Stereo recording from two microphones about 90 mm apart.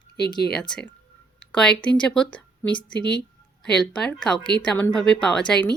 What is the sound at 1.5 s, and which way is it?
Speech, 10° left (ahead or behind).